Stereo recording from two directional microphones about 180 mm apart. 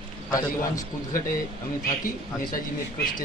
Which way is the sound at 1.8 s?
50° left (ahead or behind).